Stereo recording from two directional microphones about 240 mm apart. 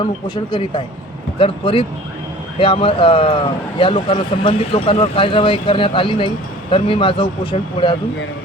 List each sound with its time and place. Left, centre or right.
0.5 s speech: left